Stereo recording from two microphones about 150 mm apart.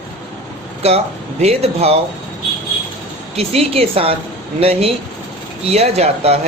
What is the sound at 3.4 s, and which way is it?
A woman's voice, 40° right (ahead or behind).